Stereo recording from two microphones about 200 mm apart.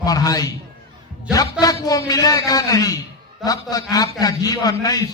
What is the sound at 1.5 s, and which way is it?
A man's voice, 20° left (ahead or behind).